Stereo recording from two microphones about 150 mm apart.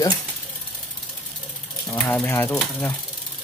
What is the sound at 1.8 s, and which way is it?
Speech, 5° left (ahead or behind).